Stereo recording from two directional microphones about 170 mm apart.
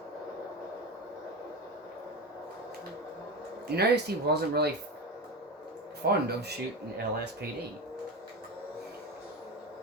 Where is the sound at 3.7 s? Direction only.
70° right (ahead or behind).